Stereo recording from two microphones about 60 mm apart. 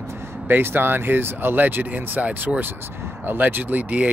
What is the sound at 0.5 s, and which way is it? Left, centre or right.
Speech, right.